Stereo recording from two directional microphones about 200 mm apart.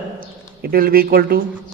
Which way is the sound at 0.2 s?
45° right (ahead or behind).